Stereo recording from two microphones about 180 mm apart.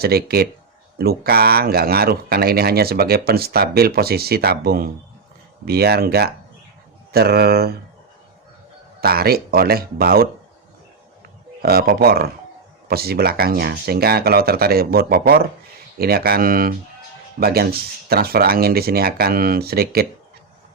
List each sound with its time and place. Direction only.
0.0 s speech: 60° right (ahead or behind)
9.0 s speech: 60° right (ahead or behind)
11.6 s speech: 55° right (ahead or behind)